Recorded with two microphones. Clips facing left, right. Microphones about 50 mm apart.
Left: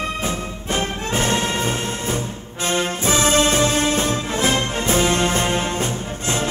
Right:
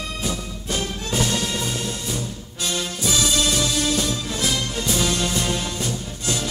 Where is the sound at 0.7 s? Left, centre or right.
Left.